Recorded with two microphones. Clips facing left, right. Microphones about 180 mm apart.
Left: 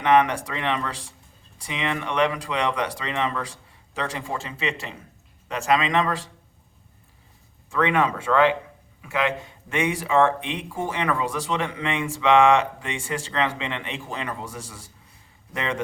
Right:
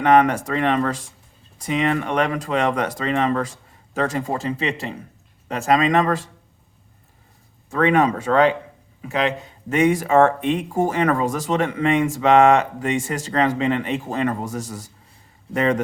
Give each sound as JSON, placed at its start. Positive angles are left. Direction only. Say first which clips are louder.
{"t": 0.0, "sound": "speech", "louder": "right 4 dB", "side_deg": -45}
{"t": 7.7, "sound": "speech", "louder": "right 5 dB", "side_deg": -45}